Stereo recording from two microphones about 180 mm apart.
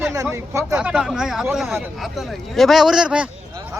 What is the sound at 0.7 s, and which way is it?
A man's voice, 5° right (ahead or behind).